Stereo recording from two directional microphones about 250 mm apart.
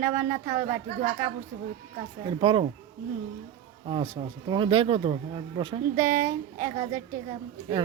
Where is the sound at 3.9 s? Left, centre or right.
Centre.